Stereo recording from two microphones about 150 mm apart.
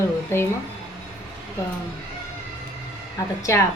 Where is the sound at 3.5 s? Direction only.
20° left (ahead or behind).